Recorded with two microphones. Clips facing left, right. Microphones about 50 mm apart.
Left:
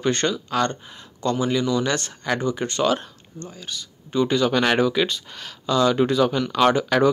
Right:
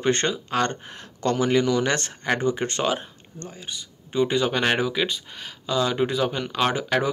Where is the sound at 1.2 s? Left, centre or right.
Right.